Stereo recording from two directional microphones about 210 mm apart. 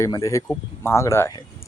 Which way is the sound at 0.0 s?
15° left (ahead or behind).